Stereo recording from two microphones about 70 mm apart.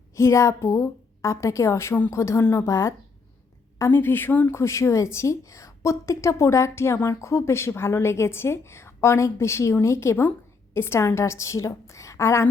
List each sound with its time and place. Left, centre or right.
0.2 s a woman's voice: left
3.8 s a woman's voice: left
4.5 s a woman's voice: left